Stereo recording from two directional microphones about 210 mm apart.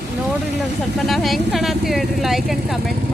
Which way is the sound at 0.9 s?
Centre (ahead or behind).